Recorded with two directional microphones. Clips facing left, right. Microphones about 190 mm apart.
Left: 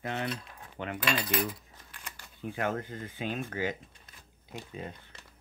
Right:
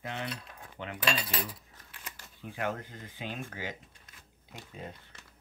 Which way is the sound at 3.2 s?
50° left (ahead or behind).